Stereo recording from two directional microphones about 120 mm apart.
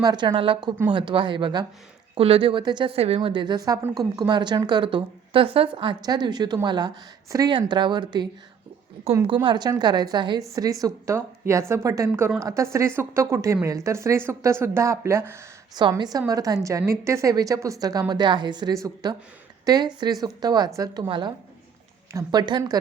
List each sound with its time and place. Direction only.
0.0 s speech: 40° right (ahead or behind)
2.1 s speech: 50° right (ahead or behind)
2.9 s a woman's voice: 55° right (ahead or behind)
3.2 s speech: 40° right (ahead or behind); by 15.4 s 25° right (ahead or behind)
15.7 s speech: 35° right (ahead or behind)